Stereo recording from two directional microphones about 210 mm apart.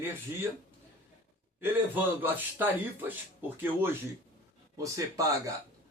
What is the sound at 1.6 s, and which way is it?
A man's voice, 10° right (ahead or behind).